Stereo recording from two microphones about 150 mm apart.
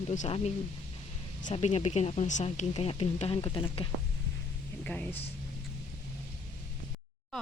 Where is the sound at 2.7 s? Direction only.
40° left (ahead or behind).